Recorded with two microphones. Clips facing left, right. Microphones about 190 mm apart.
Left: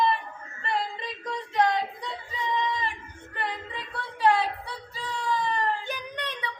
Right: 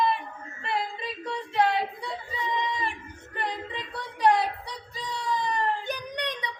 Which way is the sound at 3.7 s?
20° right (ahead or behind).